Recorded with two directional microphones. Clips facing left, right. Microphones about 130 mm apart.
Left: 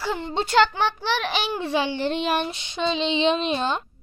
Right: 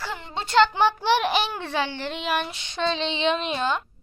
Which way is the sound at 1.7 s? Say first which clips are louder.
Left 4 dB; 15° left (ahead or behind).